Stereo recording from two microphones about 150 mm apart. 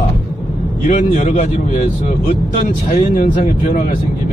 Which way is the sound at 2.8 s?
65° left (ahead or behind).